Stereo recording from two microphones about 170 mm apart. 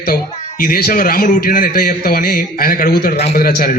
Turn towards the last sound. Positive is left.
turn(degrees=60)  # may be behind; listen again after turning